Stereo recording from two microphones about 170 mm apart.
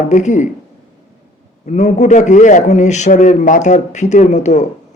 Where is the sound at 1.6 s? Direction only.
45° left (ahead or behind).